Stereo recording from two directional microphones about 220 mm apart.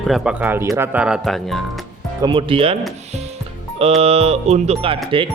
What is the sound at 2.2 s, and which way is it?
Speech, 20° right (ahead or behind).